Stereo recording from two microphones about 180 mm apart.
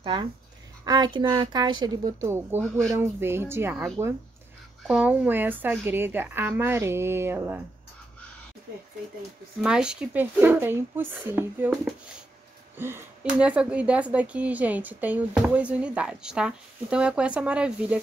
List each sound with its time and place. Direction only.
0.0 s a woman's voice: 25° right (ahead or behind)
4.8 s speech: 5° right (ahead or behind)
9.6 s speech: 5° right (ahead or behind)
12.7 s speech: 10° right (ahead or behind)